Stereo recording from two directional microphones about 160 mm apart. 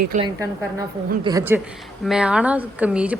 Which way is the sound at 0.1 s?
55° right (ahead or behind).